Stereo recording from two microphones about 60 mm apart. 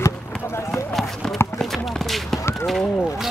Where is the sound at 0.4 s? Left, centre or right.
Left.